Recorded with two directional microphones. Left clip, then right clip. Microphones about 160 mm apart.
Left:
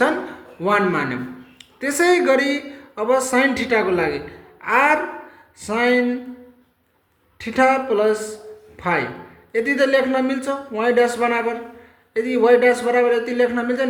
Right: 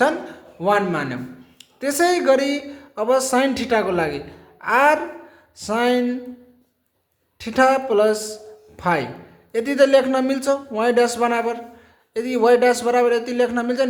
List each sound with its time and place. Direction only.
0.0 s a man's voice: 20° right (ahead or behind)
7.4 s a man's voice: 25° right (ahead or behind)